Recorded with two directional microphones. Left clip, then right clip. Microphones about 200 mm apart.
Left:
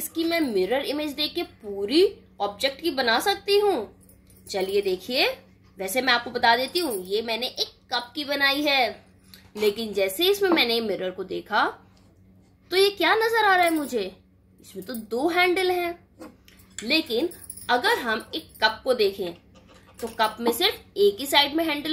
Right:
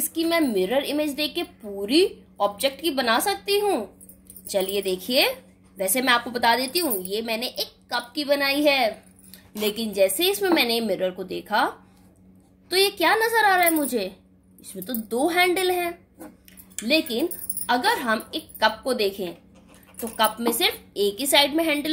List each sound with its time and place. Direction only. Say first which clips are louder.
0.0 s a woman's voice: right 2 dB; 20° right (ahead or behind)
9.8 s a woman's voice: right 3 dB; 25° right (ahead or behind)
17.6 s a woman's voice: right 1 dB; 25° right (ahead or behind)